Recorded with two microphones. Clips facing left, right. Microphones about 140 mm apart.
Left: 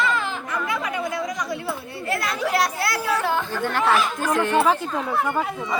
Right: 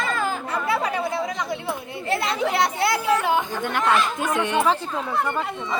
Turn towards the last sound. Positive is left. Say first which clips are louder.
# left 2 dB
turn(degrees=5)  # may be behind; listen again after turning